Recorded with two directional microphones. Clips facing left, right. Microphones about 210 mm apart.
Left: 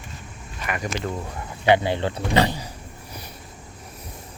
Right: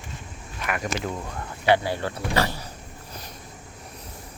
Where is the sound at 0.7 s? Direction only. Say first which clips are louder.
Even; centre (ahead or behind).